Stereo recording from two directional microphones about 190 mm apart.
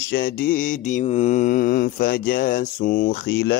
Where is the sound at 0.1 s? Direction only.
50° left (ahead or behind).